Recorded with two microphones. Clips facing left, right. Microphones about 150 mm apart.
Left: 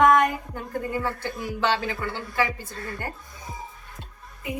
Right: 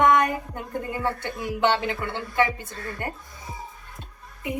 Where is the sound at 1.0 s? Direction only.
20° right (ahead or behind).